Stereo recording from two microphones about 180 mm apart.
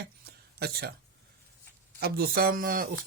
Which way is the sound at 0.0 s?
65° right (ahead or behind).